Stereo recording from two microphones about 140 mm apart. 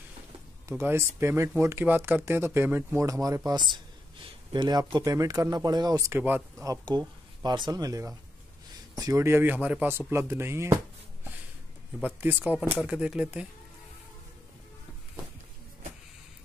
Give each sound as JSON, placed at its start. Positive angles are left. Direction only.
{"t": 0.7, "sound": "speech", "side_deg": -20}
{"t": 12.0, "sound": "speech", "side_deg": -15}